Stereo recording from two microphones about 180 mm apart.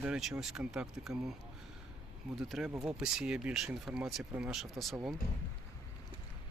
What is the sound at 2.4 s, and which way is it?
Speech, centre (ahead or behind).